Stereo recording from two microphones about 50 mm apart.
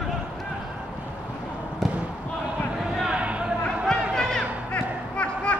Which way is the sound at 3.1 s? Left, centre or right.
Right.